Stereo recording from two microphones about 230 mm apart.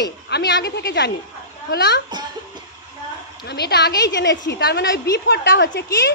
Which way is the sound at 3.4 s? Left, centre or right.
Left.